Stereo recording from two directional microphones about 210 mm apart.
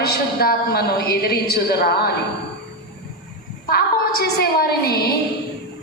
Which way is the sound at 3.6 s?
45° left (ahead or behind).